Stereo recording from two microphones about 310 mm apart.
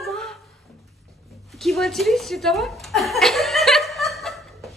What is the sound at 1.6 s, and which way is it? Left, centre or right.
A woman's voice, centre.